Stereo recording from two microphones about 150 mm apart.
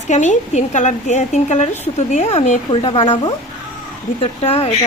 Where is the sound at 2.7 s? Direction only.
35° left (ahead or behind).